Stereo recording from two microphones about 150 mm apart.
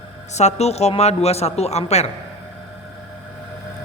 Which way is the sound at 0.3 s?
45° left (ahead or behind).